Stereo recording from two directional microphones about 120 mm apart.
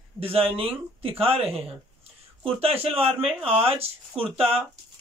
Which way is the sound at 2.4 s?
55° right (ahead or behind).